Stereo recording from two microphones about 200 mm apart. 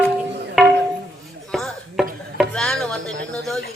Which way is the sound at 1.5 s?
Centre (ahead or behind).